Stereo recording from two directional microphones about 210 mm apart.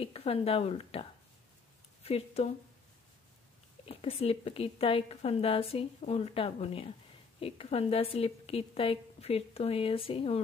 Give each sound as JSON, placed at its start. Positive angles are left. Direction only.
{"t": 0.0, "sound": "a woman's voice", "side_deg": 30}
{"t": 2.0, "sound": "a woman's voice", "side_deg": 30}
{"t": 3.8, "sound": "a woman's voice", "side_deg": 25}